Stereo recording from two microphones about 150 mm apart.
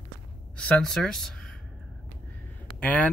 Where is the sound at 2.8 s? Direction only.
10° left (ahead or behind).